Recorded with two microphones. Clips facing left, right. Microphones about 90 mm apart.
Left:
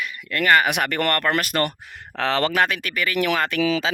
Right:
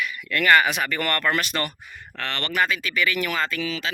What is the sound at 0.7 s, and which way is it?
Speech, 65° left (ahead or behind).